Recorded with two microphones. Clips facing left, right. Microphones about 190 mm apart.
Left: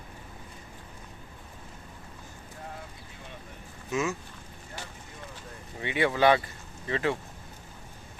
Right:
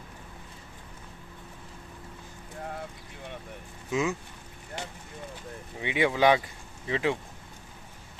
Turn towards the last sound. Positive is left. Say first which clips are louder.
# right 1 dB
turn(degrees=-15)  # may be behind; listen again after turning